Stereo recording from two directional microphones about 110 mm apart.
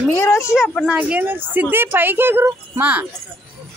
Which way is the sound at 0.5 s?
Centre (ahead or behind).